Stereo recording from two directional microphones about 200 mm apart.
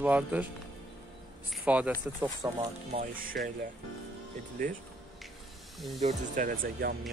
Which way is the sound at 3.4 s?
50° right (ahead or behind).